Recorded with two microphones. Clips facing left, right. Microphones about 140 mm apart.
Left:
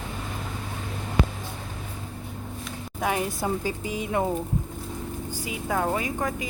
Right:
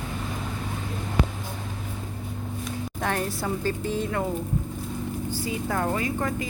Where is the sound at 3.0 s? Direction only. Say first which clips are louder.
Left 2 dB; 10° left (ahead or behind).